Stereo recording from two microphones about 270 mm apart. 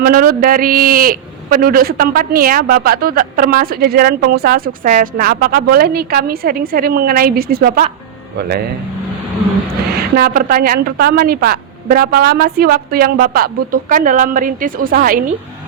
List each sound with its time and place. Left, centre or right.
0.0 s a man's voice: right
10.2 s a man's voice: right